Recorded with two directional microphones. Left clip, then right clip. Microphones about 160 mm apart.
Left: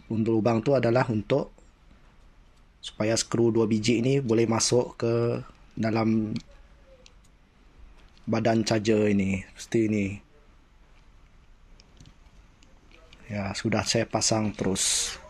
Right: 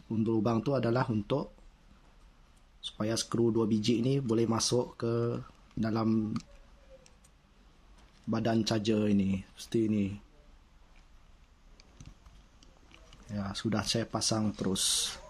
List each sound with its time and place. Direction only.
0.1 s speech: 5° left (ahead or behind)
2.8 s speech: 10° left (ahead or behind)
8.3 s speech: 10° left (ahead or behind)
13.3 s speech: 10° left (ahead or behind)